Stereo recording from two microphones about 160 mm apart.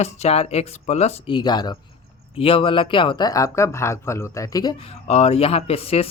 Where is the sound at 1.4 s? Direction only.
25° left (ahead or behind).